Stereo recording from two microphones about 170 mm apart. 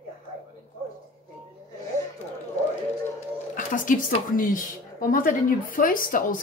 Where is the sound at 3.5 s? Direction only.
50° left (ahead or behind).